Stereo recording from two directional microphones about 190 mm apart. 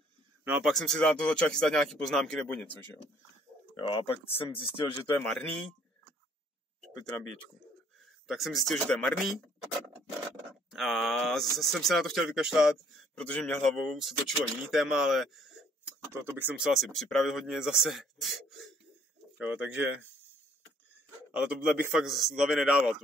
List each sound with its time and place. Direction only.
0.5 s speech: centre (ahead or behind)
3.7 s speech: 25° left (ahead or behind)
5.2 s speech: centre (ahead or behind)
8.3 s speech: centre (ahead or behind)
10.7 s speech: centre (ahead or behind)
16.1 s speech: 10° right (ahead or behind)
21.3 s speech: 5° right (ahead or behind)